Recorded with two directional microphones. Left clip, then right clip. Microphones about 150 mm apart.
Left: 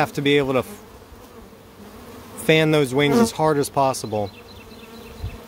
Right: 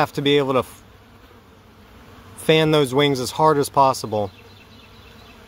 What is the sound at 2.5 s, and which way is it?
Speech, 15° left (ahead or behind).